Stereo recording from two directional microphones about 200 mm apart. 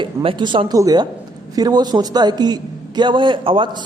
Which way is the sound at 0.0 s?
25° right (ahead or behind).